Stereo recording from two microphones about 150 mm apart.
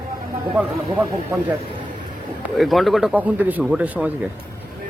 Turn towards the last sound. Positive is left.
turn(degrees=-10)  # may be behind; listen again after turning